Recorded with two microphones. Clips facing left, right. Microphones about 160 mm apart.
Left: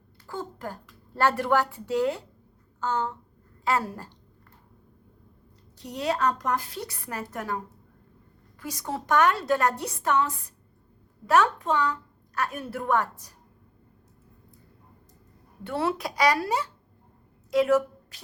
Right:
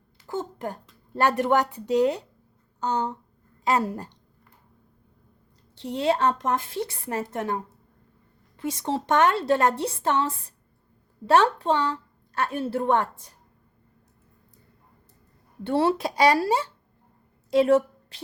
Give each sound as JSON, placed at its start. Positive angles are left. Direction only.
{"t": 0.3, "sound": "a woman's voice", "side_deg": -20}
{"t": 5.7, "sound": "a woman's voice", "side_deg": -25}
{"t": 15.6, "sound": "a woman's voice", "side_deg": -30}
{"t": 17.5, "sound": "a sound", "side_deg": -30}